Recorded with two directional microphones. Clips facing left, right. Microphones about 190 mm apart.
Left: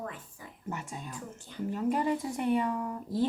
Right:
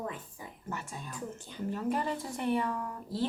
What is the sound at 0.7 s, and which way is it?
A woman's voice, 20° left (ahead or behind).